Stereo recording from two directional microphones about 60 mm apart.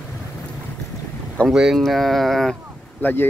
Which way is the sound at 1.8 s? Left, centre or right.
Centre.